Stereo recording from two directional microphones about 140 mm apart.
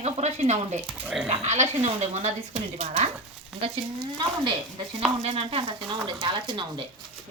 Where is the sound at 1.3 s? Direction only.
50° right (ahead or behind).